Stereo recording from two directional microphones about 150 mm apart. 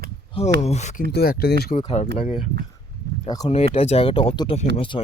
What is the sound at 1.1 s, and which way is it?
Speech, 90° left.